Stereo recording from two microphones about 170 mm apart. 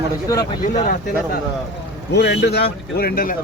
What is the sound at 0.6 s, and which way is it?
Speech, 45° left (ahead or behind).